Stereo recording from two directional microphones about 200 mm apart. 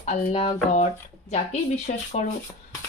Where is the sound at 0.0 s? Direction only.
35° left (ahead or behind).